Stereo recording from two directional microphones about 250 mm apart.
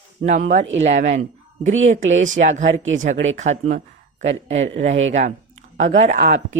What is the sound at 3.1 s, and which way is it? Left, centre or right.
Speech, right.